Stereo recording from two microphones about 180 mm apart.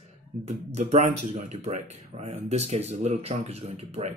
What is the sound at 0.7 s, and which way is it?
Speech, 35° right (ahead or behind).